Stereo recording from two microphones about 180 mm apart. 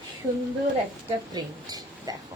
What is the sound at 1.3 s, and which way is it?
Speech, 20° right (ahead or behind).